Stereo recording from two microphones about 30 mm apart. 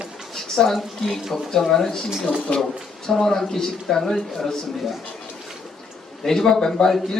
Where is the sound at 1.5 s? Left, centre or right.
Centre.